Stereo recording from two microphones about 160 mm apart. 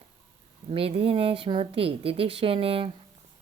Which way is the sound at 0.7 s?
35° right (ahead or behind).